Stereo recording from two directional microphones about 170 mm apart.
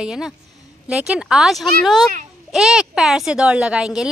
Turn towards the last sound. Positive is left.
turn(degrees=-5)  # may be behind; listen again after turning